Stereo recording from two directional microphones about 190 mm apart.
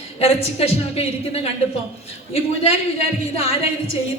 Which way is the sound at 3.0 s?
30° left (ahead or behind).